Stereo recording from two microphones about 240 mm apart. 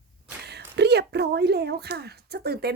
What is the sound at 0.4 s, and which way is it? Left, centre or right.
A woman's voice, right.